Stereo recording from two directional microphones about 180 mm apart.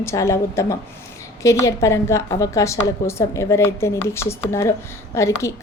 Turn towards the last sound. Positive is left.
turn(degrees=15)  # may be behind; listen again after turning